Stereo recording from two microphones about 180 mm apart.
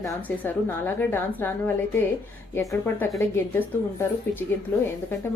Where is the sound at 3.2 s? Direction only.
15° left (ahead or behind).